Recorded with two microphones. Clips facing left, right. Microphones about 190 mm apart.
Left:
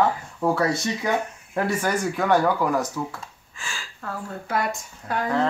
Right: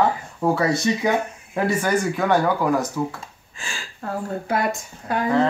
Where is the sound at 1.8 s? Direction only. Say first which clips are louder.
Right 1 dB; 10° right (ahead or behind).